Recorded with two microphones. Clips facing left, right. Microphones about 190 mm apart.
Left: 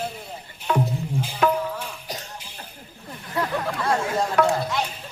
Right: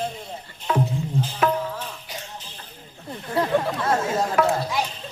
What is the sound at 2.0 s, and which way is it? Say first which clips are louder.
Music: left 2 dB; 40° left (ahead or behind).